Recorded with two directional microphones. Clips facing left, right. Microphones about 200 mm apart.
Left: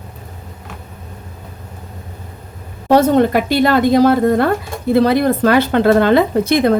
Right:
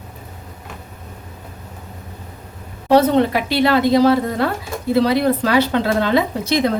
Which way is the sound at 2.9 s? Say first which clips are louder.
Left 2 dB; 45° left (ahead or behind).